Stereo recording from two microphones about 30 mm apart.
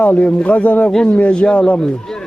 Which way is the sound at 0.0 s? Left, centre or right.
Left.